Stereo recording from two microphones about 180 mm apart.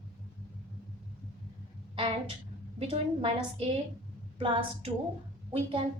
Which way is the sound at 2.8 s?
30° right (ahead or behind).